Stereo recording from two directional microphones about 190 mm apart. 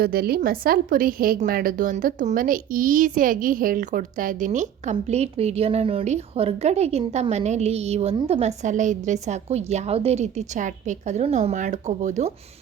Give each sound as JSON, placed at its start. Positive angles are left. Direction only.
{"t": 0.0, "sound": "a woman's voice", "side_deg": -55}